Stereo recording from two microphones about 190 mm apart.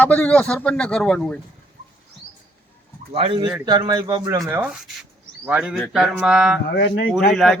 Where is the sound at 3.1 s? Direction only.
30° right (ahead or behind).